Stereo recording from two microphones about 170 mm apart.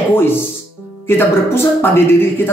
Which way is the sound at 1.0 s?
15° left (ahead or behind).